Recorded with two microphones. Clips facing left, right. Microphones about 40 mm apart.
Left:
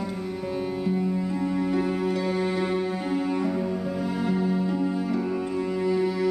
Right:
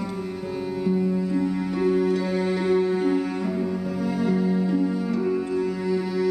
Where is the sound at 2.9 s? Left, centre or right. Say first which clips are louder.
Right 3 dB; centre.